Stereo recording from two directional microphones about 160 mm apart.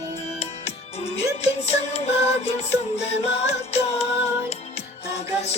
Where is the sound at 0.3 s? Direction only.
40° left (ahead or behind).